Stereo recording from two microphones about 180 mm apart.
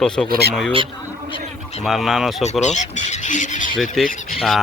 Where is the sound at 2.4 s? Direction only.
40° left (ahead or behind).